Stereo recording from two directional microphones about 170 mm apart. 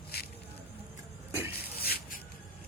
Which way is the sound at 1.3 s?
15° right (ahead or behind).